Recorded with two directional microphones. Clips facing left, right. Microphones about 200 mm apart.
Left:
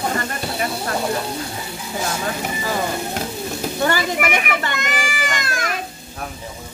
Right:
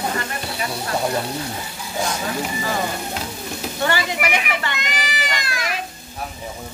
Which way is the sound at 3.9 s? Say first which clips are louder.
Even; 45° left (ahead or behind).